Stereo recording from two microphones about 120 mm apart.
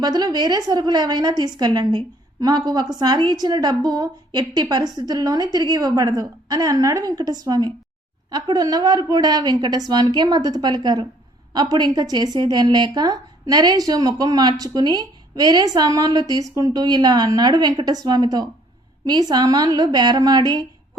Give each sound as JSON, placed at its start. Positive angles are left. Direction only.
{"t": 0.0, "sound": "speech", "side_deg": -35}